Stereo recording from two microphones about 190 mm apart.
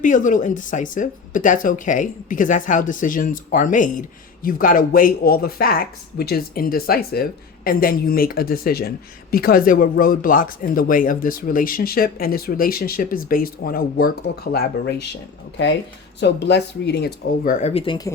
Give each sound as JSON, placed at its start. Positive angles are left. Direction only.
{"t": 0.0, "sound": "speech", "side_deg": 40}
{"t": 16.2, "sound": "speech", "side_deg": 60}